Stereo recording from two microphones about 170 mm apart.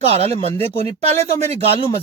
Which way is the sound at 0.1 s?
35° right (ahead or behind).